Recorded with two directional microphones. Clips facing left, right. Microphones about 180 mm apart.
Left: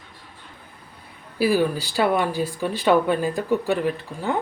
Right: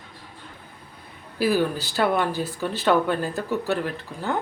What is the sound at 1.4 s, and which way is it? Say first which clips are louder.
Speech: left 2 dB; 10° left (ahead or behind).